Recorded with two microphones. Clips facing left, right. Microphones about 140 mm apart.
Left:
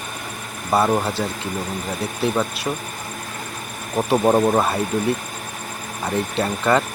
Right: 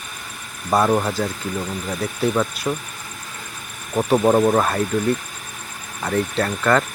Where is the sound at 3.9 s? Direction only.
10° left (ahead or behind).